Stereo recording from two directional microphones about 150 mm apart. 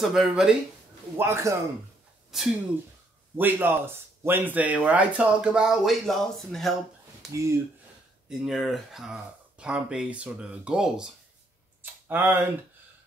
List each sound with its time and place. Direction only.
0.0 s speech: centre (ahead or behind)
1.1 s speech: 15° right (ahead or behind)
2.3 s speech: centre (ahead or behind)
3.3 s speech: 15° right (ahead or behind); by 6.7 s centre (ahead or behind)
7.3 s speech: 20° right (ahead or behind)
8.3 s speech: centre (ahead or behind)